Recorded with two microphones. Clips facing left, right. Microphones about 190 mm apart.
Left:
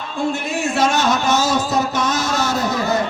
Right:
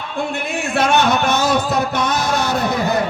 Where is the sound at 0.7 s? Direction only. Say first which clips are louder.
Right 2 dB; 60° right (ahead or behind).